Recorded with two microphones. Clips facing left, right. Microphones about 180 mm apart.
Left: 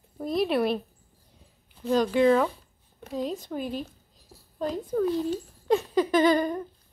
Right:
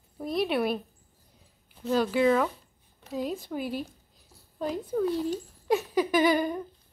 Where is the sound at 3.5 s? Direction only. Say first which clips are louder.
Left 1 dB; 10° right (ahead or behind).